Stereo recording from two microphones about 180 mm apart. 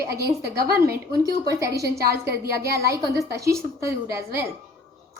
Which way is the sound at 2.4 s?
60° right (ahead or behind).